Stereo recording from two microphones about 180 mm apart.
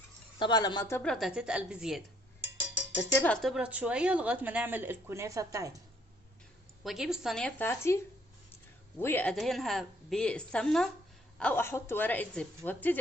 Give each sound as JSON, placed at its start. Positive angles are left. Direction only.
{"t": 0.3, "sound": "a woman's voice", "side_deg": 25}
{"t": 1.0, "sound": "a woman's voice", "side_deg": 0}
{"t": 2.9, "sound": "a woman's voice", "side_deg": 15}
{"t": 3.4, "sound": "speech", "side_deg": -5}
{"t": 6.8, "sound": "a woman's voice", "side_deg": 0}